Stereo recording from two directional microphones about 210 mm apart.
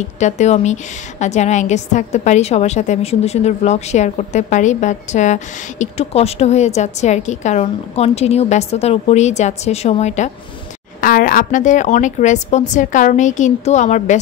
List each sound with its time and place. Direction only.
0.2 s a woman's voice: 35° left (ahead or behind)